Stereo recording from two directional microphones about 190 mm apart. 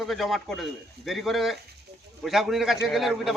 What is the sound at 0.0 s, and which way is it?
A man's voice, centre (ahead or behind).